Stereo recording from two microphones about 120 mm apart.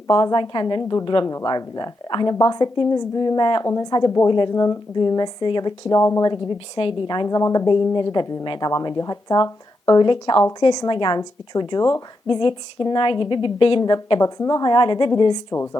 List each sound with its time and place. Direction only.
0.1 s a woman's voice: 35° left (ahead or behind)
6.7 s a woman's voice: 45° left (ahead or behind)
15.5 s speech: 20° left (ahead or behind)